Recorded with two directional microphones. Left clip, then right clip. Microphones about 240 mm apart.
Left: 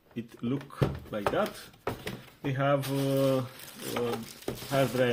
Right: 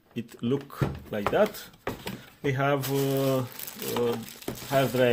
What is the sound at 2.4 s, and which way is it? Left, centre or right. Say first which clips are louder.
Speech: right 2 dB; right.